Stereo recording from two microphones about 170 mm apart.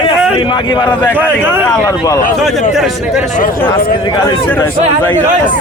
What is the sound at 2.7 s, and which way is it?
Speech, centre (ahead or behind).